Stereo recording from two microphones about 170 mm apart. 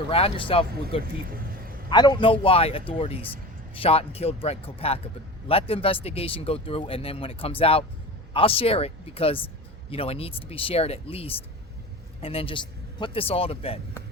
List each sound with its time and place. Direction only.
0.1 s speech: 35° left (ahead or behind)
1.4 s a sound: 60° right (ahead or behind)
1.9 s speech: 25° left (ahead or behind)